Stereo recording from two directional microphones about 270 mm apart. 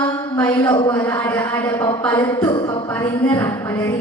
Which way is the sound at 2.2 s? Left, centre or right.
Centre.